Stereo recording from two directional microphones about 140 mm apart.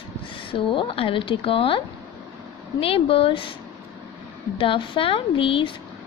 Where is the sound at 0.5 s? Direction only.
40° left (ahead or behind).